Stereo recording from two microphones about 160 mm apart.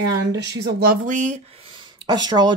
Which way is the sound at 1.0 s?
50° right (ahead or behind).